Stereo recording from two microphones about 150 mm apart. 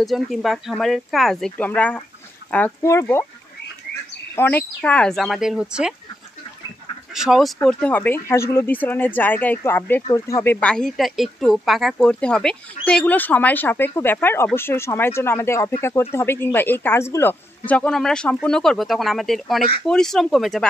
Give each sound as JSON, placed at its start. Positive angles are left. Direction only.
{"t": 0.0, "sound": "speech", "side_deg": 0}
{"t": 4.4, "sound": "speech", "side_deg": 15}
{"t": 7.2, "sound": "speech", "side_deg": 0}
{"t": 7.6, "sound": "speech", "side_deg": 10}